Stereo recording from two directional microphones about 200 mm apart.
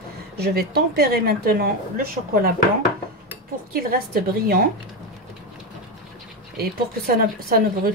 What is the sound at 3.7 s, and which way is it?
Speech, 50° right (ahead or behind).